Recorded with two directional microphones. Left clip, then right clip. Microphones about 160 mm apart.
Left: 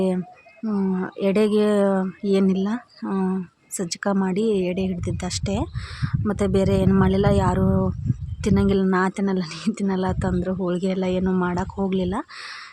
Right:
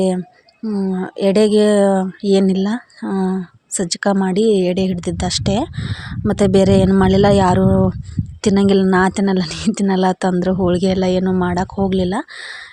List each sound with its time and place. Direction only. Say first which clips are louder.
0.6 s speech: right 4 dB; 15° right (ahead or behind)
1.2 s speech: right 7 dB; 25° right (ahead or behind)